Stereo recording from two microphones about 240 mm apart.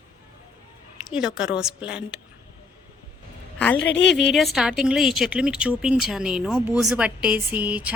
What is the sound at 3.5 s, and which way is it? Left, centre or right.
Speech, centre.